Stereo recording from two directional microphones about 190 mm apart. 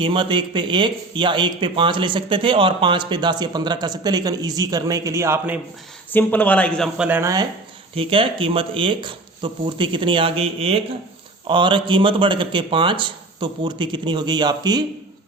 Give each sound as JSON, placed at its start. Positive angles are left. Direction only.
{"t": 0.0, "sound": "a man's voice", "side_deg": -25}
{"t": 6.1, "sound": "speech", "side_deg": 10}
{"t": 7.1, "sound": "speech", "side_deg": -15}
{"t": 7.9, "sound": "a man's voice", "side_deg": -30}